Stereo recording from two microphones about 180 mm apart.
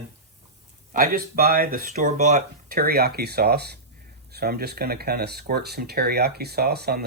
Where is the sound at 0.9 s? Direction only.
55° right (ahead or behind).